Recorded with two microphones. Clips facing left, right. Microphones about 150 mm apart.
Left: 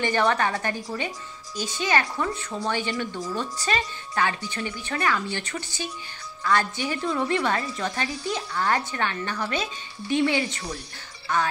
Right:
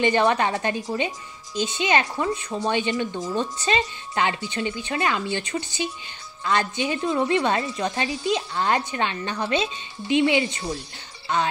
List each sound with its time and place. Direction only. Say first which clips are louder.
0.0 s a woman's voice: right 3 dB; 20° right (ahead or behind)